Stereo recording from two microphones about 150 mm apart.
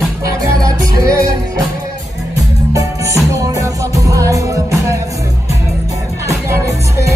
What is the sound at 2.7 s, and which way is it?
Music, 20° right (ahead or behind).